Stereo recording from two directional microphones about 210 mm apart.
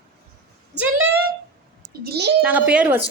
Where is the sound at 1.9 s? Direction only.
50° right (ahead or behind).